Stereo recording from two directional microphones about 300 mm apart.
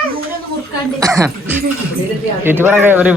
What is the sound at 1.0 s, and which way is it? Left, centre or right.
Speech, centre.